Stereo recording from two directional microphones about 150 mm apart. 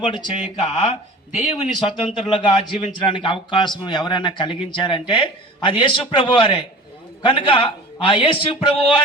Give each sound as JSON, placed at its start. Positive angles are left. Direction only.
{"t": 0.0, "sound": "speech", "side_deg": 35}
{"t": 2.2, "sound": "speech", "side_deg": 30}